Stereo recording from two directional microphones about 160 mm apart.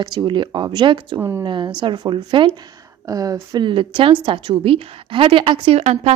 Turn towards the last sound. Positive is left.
turn(degrees=-40)  # may be behind; listen again after turning